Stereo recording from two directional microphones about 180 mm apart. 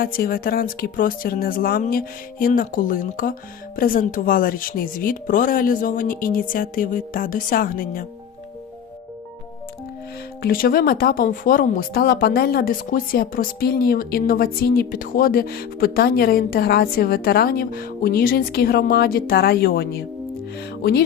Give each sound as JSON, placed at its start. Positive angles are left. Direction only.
{"t": 0.0, "sound": "speech", "side_deg": 55}
{"t": 10.4, "sound": "speech", "side_deg": 55}